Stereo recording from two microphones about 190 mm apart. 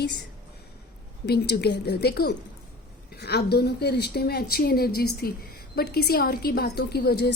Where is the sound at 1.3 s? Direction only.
60° left (ahead or behind).